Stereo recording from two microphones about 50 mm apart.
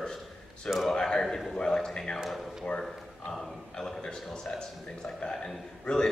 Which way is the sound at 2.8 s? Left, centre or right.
Centre.